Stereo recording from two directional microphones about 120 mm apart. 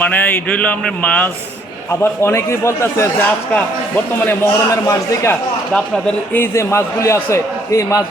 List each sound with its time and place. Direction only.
0.0 s a man's voice: 10° left (ahead or behind)